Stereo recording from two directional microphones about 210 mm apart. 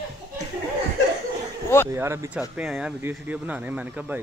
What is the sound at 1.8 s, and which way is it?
Speech, 10° right (ahead or behind).